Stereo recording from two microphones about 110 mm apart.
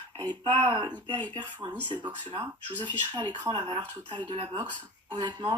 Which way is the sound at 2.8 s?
45° right (ahead or behind).